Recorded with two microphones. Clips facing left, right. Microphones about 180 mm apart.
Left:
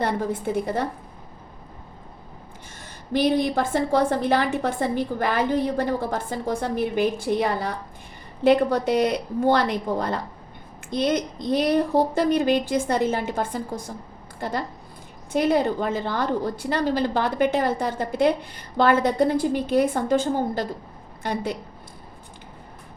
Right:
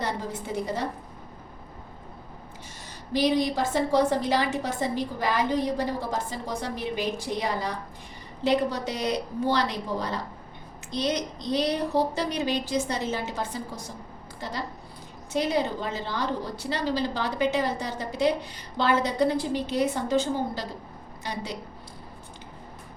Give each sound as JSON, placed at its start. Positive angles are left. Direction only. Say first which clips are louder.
{"t": 0.0, "sound": "a woman's voice", "louder": "left 7 dB", "side_deg": 55}
{"t": 3.1, "sound": "a woman's voice", "louder": "left 3 dB", "side_deg": 55}